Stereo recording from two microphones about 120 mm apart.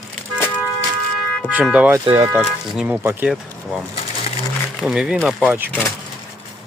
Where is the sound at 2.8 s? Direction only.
15° right (ahead or behind).